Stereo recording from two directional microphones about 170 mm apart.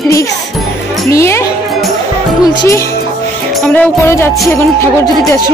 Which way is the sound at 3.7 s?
10° left (ahead or behind).